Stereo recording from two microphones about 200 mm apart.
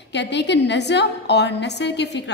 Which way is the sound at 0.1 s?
60° left (ahead or behind).